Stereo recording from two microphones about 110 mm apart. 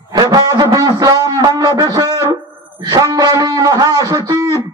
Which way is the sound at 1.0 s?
35° right (ahead or behind).